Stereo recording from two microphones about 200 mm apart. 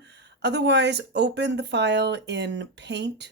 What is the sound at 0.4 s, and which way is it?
Speech, 60° right (ahead or behind).